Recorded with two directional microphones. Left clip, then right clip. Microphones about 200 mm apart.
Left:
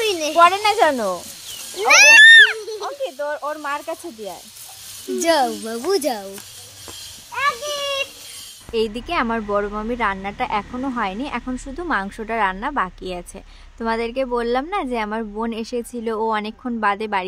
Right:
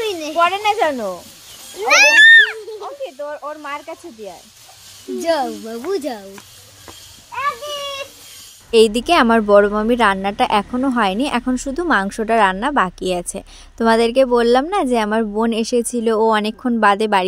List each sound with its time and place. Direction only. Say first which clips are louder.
0.0 s a sound: left 2 dB; 10° left (ahead or behind)
0.4 s speech: left 2 dB; 25° left (ahead or behind)
1.8 s speech: left 1 dB; 15° left (ahead or behind)
2.8 s speech: left 2 dB; 25° left (ahead or behind)
5.2 s speech: left 1 dB; 10° left (ahead or behind)
7.3 s a sound: left 1 dB; 10° right (ahead or behind)
8.7 s a woman's voice: right 9 dB; 35° right (ahead or behind)